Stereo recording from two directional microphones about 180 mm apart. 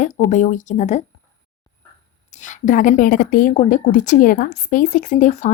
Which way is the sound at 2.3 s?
40° left (ahead or behind).